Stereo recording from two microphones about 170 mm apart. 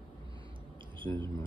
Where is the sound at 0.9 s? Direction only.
30° right (ahead or behind).